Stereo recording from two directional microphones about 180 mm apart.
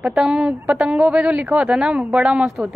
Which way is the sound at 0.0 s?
5° right (ahead or behind).